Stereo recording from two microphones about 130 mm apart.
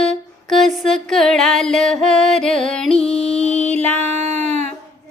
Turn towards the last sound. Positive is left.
turn(degrees=-60)  # may be behind; listen again after turning